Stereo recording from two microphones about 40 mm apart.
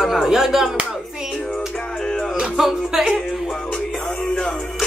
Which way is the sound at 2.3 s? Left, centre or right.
Centre.